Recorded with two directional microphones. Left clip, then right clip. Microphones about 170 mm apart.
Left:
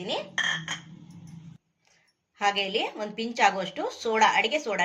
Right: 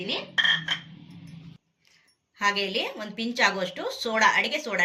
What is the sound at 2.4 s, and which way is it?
Speech, 60° left (ahead or behind).